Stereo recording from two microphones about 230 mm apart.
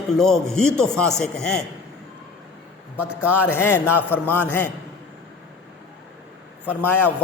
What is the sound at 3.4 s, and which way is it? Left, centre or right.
A man's voice, centre.